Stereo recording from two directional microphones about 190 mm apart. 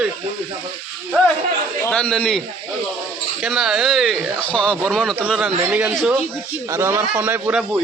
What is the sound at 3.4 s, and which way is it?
A man's voice, centre (ahead or behind).